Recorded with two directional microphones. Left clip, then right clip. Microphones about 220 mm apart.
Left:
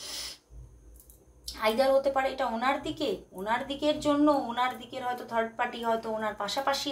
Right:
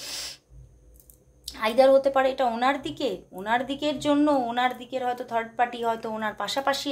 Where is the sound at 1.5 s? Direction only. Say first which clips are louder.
Right 6 dB; 45° right (ahead or behind).